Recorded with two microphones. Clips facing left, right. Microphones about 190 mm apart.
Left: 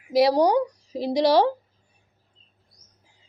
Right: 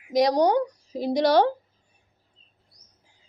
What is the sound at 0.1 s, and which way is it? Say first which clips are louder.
A woman's voice: left 2 dB; 5° left (ahead or behind).